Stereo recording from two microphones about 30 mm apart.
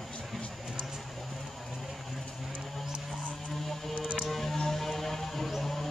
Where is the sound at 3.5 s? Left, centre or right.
Centre.